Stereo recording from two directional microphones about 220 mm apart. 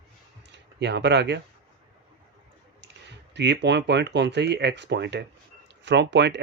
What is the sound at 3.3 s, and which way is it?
Speech, 50° right (ahead or behind).